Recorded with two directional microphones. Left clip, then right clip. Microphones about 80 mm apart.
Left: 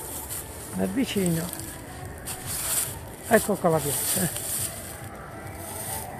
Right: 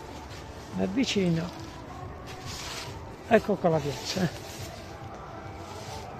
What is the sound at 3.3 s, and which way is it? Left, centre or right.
Speech, right.